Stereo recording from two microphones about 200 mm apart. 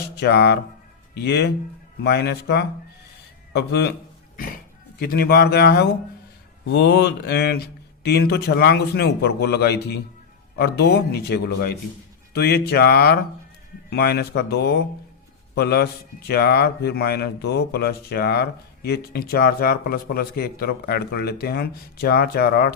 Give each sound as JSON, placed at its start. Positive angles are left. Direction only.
{"t": 0.2, "sound": "a man's voice", "side_deg": 55}
{"t": 4.9, "sound": "a man's voice", "side_deg": 50}